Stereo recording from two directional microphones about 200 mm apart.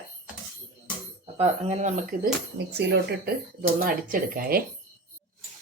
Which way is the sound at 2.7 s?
55° right (ahead or behind).